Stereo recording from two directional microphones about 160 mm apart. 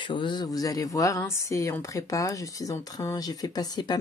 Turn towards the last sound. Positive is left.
turn(degrees=25)  # may be behind; listen again after turning